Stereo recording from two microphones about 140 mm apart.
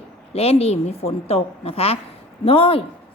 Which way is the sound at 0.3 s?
45° left (ahead or behind).